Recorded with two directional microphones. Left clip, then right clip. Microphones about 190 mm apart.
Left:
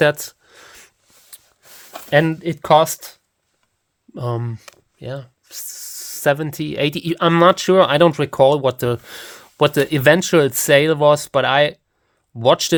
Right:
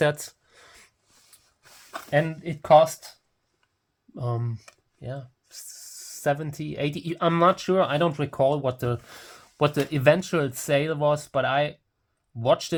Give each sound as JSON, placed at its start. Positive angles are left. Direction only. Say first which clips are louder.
{"t": 0.0, "sound": "a sound", "louder": "left 8 dB", "side_deg": 35}
{"t": 2.0, "sound": "speech", "louder": "left 9 dB", "side_deg": 60}
{"t": 4.1, "sound": "speech", "louder": "left 7 dB", "side_deg": 40}